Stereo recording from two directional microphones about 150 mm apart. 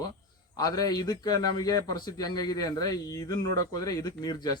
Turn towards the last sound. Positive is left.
turn(degrees=25)  # may be behind; listen again after turning